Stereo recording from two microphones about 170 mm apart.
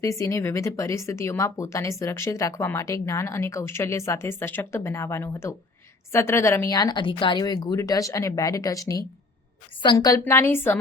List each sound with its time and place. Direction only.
0.0 s speech: 20° left (ahead or behind)